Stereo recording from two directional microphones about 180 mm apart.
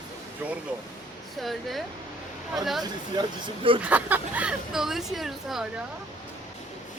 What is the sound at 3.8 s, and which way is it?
Speech, 10° right (ahead or behind).